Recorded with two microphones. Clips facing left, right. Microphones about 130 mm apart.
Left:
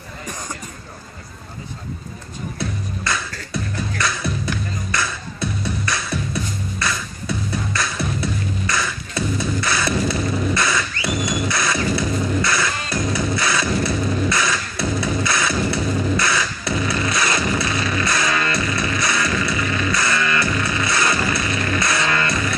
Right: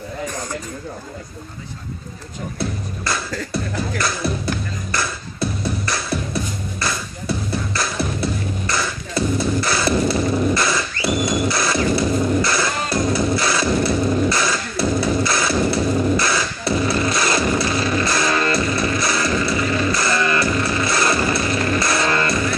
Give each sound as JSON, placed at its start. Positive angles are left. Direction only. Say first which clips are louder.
{"t": 2.6, "sound": "music", "louder": "right 1 dB", "side_deg": -35}
{"t": 10.5, "sound": "a sound", "louder": "right 1 dB", "side_deg": -35}
{"t": 11.2, "sound": "music", "louder": "right 2 dB", "side_deg": -35}
{"t": 14.3, "sound": "motorcycle", "louder": "right 1 dB", "side_deg": -35}